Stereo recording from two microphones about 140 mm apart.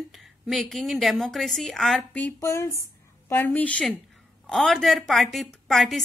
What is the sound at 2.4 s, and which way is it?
A woman's voice, 20° left (ahead or behind).